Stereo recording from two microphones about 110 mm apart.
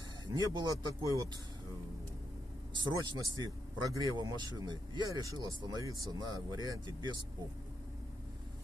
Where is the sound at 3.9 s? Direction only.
35° right (ahead or behind).